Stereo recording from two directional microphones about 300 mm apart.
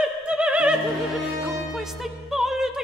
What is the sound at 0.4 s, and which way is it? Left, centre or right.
Opera, centre.